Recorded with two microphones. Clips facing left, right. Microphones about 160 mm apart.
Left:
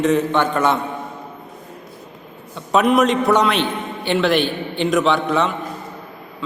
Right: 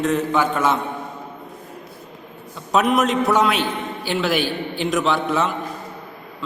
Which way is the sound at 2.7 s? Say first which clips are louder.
Left 3 dB; centre (ahead or behind).